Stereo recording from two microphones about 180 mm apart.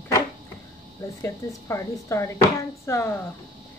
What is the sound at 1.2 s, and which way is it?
Speech, 15° left (ahead or behind).